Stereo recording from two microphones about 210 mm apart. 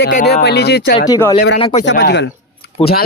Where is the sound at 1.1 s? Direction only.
10° left (ahead or behind).